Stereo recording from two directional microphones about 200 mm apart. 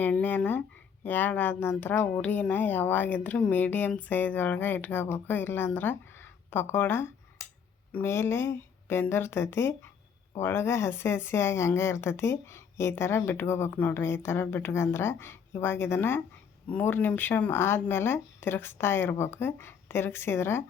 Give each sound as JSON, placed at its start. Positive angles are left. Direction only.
{"t": 0.0, "sound": "a woman's voice", "side_deg": 10}